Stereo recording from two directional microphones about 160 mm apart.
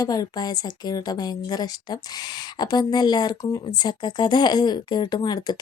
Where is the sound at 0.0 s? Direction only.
25° left (ahead or behind).